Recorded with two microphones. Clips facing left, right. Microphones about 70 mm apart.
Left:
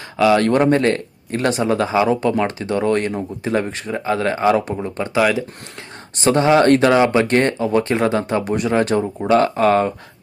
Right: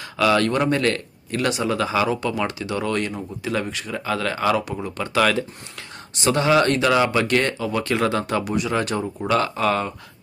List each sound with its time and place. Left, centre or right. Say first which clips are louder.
0.2 s speech: left 4 dB; left
0.4 s speech: left 5 dB; left
5.1 s speech: left 2 dB; centre
6.1 s speech: left 4 dB; left
8.5 s speech: left 8 dB; left